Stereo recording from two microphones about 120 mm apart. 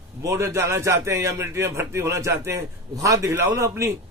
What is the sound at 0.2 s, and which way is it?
A man's voice, 25° right (ahead or behind).